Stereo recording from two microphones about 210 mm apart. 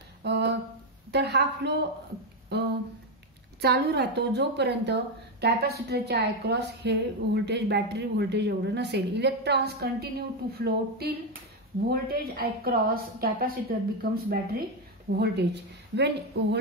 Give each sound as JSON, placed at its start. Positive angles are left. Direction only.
{"t": 0.2, "sound": "a sound", "side_deg": -55}
{"t": 1.1, "sound": "a woman's voice", "side_deg": -55}
{"t": 3.6, "sound": "a woman's voice", "side_deg": -50}